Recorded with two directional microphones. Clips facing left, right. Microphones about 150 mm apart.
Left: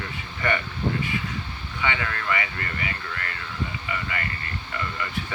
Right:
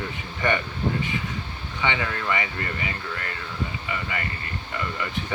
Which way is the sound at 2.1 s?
20° right (ahead or behind).